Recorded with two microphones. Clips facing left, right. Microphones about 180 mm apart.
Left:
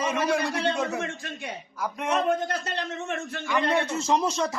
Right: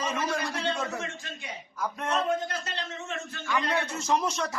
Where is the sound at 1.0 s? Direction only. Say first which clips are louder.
Left 5 dB; 60° left (ahead or behind).